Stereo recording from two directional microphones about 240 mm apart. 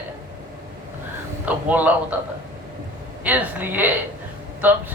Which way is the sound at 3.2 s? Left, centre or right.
Centre.